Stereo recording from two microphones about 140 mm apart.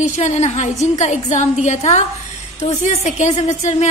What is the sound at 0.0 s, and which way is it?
Speech, 60° left (ahead or behind).